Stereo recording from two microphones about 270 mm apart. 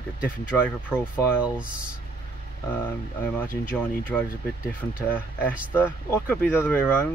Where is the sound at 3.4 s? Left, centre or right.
Centre.